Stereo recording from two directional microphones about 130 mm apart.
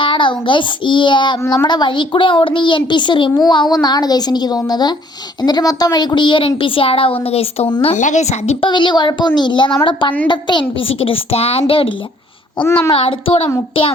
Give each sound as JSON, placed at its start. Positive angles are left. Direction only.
{"t": 0.0, "sound": "a child's voice", "side_deg": 40}
{"t": 7.9, "sound": "a woman's voice", "side_deg": 70}
{"t": 8.6, "sound": "a child's voice", "side_deg": 35}
{"t": 12.6, "sound": "a child's voice", "side_deg": 20}
{"t": 12.9, "sound": "a woman's voice", "side_deg": 45}